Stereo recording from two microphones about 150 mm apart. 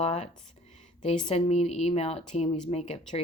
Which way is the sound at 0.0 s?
45° left (ahead or behind).